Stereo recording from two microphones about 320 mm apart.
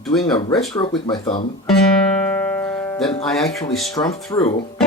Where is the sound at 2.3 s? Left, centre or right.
Centre.